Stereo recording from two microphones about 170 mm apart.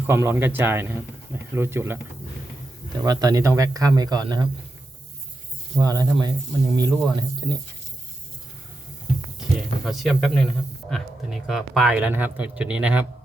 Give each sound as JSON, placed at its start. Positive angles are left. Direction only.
{"t": 0.0, "sound": "a man's voice", "side_deg": -15}
{"t": 3.0, "sound": "speech", "side_deg": -20}
{"t": 5.7, "sound": "speech", "side_deg": -20}
{"t": 9.8, "sound": "speech", "side_deg": 0}